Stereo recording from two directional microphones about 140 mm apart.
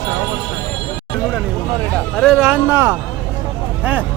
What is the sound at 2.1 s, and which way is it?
Speech, centre (ahead or behind).